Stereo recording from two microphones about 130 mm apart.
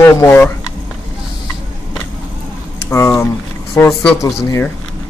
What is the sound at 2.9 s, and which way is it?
Speech, 20° left (ahead or behind).